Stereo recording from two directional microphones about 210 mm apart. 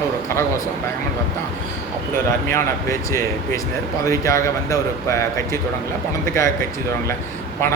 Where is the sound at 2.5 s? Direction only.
15° left (ahead or behind).